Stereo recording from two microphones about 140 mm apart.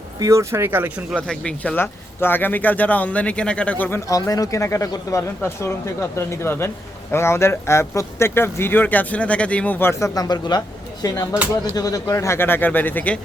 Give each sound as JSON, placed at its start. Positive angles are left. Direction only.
{"t": 0.2, "sound": "speech", "side_deg": -20}
{"t": 1.1, "sound": "speech", "side_deg": 5}
{"t": 10.2, "sound": "a man's voice", "side_deg": 30}